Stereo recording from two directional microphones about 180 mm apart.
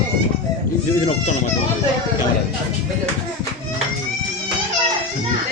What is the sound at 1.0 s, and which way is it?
Speech, 40° left (ahead or behind).